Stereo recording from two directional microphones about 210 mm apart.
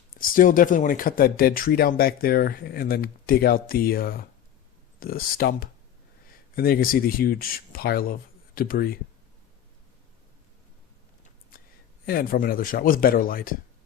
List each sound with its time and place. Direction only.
0.1 s speech: 40° left (ahead or behind)
12.0 s speech: 45° left (ahead or behind)